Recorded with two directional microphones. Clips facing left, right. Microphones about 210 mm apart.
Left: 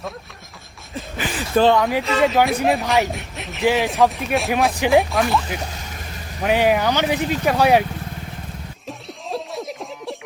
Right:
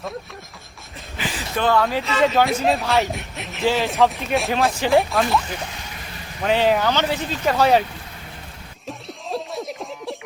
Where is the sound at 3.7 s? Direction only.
15° left (ahead or behind).